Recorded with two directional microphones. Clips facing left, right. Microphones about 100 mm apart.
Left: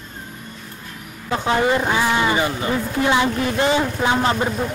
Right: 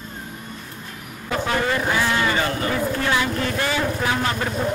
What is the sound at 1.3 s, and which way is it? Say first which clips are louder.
A man's voice: left 4 dB; 20° left (ahead or behind).